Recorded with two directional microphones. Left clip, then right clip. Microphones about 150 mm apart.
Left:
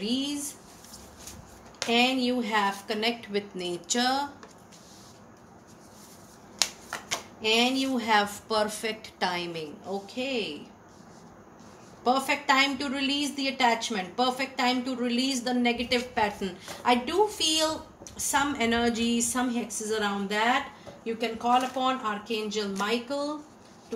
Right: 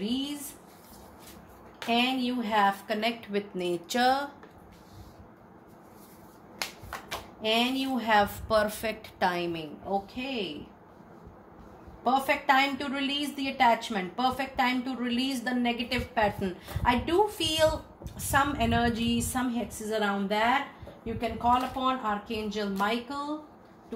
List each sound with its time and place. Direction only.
1.9 s a woman's voice: 45° right (ahead or behind)
7.4 s a woman's voice: 45° right (ahead or behind)
12.0 s a woman's voice: 45° right (ahead or behind)